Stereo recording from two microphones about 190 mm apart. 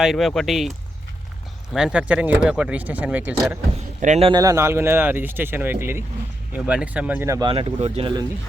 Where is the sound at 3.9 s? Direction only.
40° right (ahead or behind).